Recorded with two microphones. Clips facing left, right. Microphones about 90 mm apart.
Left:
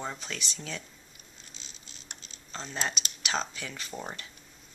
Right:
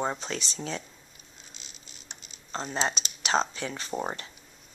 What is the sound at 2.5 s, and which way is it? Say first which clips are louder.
Speech: right 5 dB; 35° right (ahead or behind).